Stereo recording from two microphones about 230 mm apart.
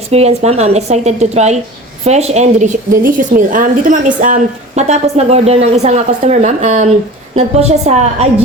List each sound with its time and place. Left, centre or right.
0.1 s a woman's voice: right